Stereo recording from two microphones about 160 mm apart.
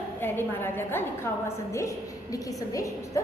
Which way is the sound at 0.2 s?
15° left (ahead or behind).